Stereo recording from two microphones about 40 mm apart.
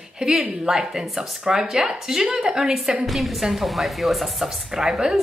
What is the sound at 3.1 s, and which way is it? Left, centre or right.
A woman's voice, centre.